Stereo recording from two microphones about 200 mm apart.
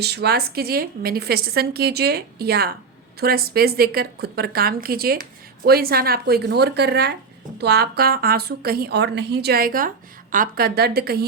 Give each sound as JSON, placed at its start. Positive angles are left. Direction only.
{"t": 0.0, "sound": "a woman's voice", "side_deg": -55}